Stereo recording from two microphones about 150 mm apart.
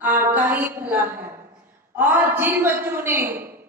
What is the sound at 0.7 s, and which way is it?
A woman's voice, 10° right (ahead or behind).